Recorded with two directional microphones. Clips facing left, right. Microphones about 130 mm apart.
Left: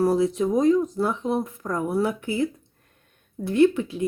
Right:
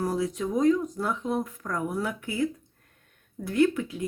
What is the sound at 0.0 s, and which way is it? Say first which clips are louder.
Speech: left 7 dB; 30° left (ahead or behind).